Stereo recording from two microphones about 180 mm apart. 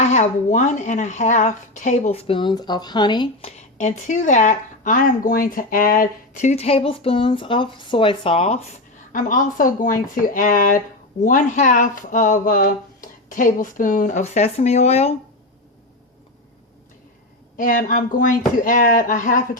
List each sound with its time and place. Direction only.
0.0 s speech: 40° left (ahead or behind); by 3.5 s 25° left (ahead or behind)
3.8 s speech: 40° left (ahead or behind)
9.1 s speech: 50° left (ahead or behind)
17.6 s speech: 50° left (ahead or behind)